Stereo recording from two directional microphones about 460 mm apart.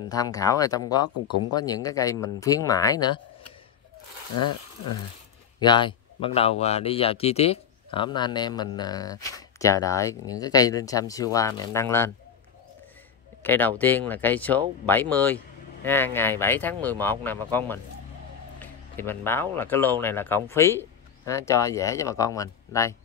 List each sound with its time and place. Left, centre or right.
0.1 s speech: centre
1.1 s speech: left
1.5 s speech: centre
5.6 s speech: centre
13.4 s speech: centre
18.6 s a sound: centre
19.5 s speech: centre